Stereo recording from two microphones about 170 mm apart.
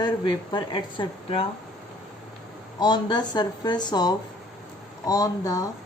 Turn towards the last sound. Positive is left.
turn(degrees=20)  # may be behind; listen again after turning